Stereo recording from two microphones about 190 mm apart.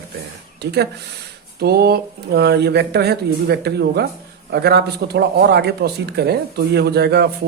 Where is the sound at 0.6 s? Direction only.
60° right (ahead or behind).